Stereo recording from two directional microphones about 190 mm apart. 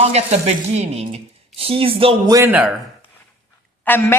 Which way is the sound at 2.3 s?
10° right (ahead or behind).